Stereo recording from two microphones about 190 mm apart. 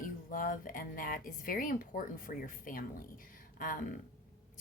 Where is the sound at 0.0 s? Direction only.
45° left (ahead or behind).